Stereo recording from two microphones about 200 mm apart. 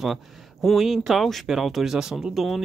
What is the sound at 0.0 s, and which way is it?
Speech, centre (ahead or behind).